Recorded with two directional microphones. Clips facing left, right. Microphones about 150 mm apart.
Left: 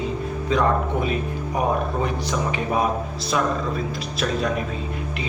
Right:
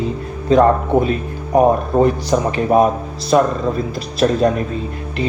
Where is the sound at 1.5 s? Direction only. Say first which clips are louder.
Right 11 dB; 40° right (ahead or behind).